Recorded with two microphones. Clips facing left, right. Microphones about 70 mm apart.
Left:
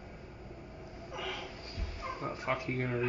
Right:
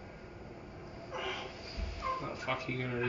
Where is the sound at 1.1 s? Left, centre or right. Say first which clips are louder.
Right 1 dB; centre.